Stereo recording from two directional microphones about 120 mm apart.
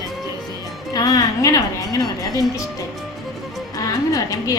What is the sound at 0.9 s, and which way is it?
A woman's voice, 30° left (ahead or behind).